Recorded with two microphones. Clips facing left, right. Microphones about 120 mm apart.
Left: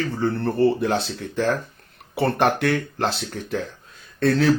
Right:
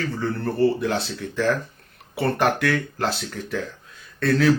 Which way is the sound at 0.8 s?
55° left (ahead or behind).